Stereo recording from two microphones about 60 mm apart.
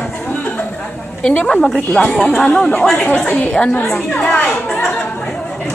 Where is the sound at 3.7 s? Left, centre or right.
Left.